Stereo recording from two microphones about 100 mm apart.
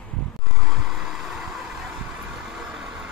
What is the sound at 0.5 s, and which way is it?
Vehicle, centre (ahead or behind).